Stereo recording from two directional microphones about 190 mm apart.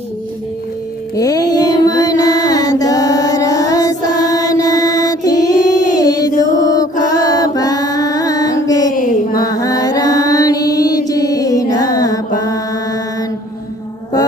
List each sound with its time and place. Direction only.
1.1 s mantra: 20° left (ahead or behind)
7.0 s female singing: 20° left (ahead or behind)
8.9 s a sound: 45° left (ahead or behind)
9.3 s mantra: 20° left (ahead or behind)